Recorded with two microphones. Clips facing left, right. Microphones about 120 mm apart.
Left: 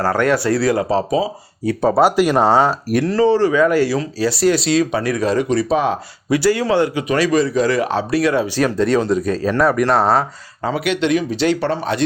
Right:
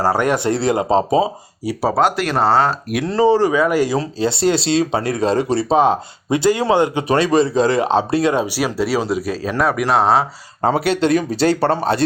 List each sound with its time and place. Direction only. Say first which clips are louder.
0.0 s speech: even; 15° right (ahead or behind)
1.6 s speech: left 3 dB; 5° right (ahead or behind)
2.0 s speech: left 3 dB; 10° left (ahead or behind)
3.0 s speech: right 1 dB; 15° right (ahead or behind)
3.9 s speech: even; 30° right (ahead or behind); by 10.2 s centre (ahead or behind)
10.6 s speech: right 3 dB; 40° right (ahead or behind)